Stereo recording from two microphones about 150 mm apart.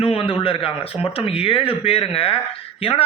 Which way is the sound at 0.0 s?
35° left (ahead or behind).